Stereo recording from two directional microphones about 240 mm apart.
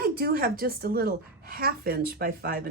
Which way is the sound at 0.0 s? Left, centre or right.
Right.